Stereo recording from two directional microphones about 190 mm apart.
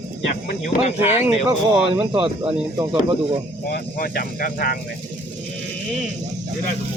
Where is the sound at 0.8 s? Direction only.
35° left (ahead or behind).